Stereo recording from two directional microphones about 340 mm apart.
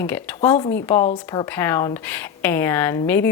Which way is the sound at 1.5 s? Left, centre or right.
Centre.